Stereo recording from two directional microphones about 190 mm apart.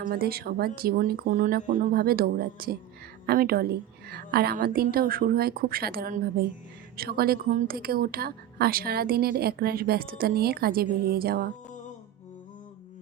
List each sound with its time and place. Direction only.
0.0 s a woman's voice: 50° right (ahead or behind)